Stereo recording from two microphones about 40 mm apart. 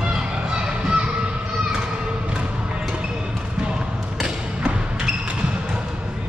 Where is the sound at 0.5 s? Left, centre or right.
Right.